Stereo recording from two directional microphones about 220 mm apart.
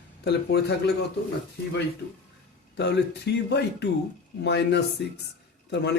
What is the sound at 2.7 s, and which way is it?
Speech, 50° left (ahead or behind).